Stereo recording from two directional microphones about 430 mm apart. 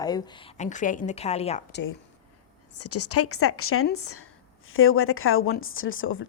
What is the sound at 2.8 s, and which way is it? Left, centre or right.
A woman's voice, left.